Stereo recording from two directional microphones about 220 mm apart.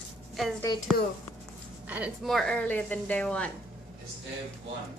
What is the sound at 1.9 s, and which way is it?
A woman's voice, 5° right (ahead or behind).